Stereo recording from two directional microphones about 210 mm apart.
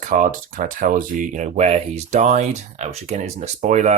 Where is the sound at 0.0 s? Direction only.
40° right (ahead or behind).